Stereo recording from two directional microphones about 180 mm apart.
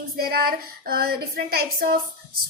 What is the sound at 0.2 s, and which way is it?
Speech, 55° right (ahead or behind).